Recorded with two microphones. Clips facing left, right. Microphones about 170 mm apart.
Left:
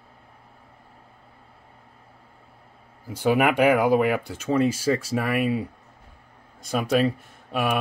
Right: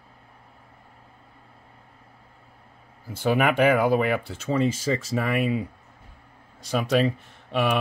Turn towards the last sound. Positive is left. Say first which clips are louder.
# right 1 dB
turn(degrees=5)  # may be behind; listen again after turning